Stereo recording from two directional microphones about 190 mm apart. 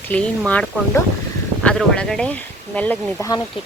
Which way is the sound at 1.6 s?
5° left (ahead or behind).